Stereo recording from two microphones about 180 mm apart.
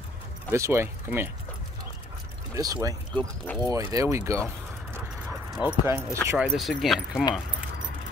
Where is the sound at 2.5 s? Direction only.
20° right (ahead or behind).